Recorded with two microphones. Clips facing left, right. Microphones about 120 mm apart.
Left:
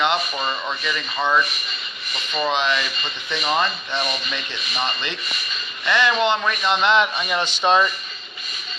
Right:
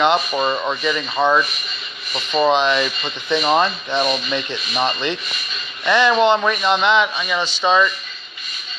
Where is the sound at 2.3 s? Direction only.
35° right (ahead or behind).